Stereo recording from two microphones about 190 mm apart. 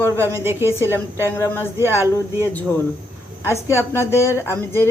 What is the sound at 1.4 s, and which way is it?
A woman's voice, 15° left (ahead or behind).